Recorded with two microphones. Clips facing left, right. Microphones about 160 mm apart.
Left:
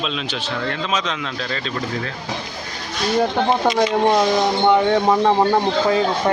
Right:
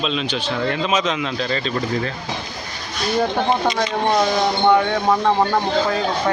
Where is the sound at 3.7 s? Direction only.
10° left (ahead or behind).